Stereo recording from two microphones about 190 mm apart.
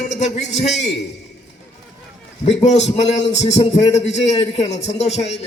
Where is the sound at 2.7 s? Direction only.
35° left (ahead or behind).